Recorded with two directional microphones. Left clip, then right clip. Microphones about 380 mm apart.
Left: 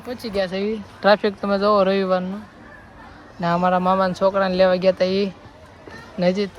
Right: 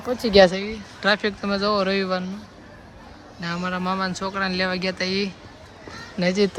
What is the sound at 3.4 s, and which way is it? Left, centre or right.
A man's voice, centre.